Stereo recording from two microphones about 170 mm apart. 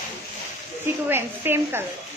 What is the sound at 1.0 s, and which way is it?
Speech, 10° right (ahead or behind).